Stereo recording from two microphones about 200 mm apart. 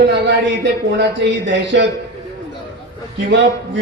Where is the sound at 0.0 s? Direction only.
65° right (ahead or behind).